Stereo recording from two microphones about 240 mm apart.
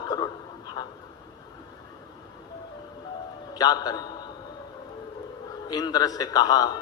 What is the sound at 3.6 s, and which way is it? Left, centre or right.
Speech, centre.